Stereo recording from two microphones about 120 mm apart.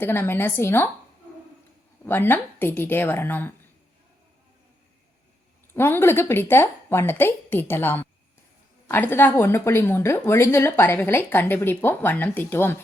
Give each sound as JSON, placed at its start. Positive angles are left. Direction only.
{"t": 0.0, "sound": "a woman's voice", "side_deg": 20}
{"t": 2.0, "sound": "a woman's voice", "side_deg": 15}
{"t": 5.7, "sound": "a woman's voice", "side_deg": 20}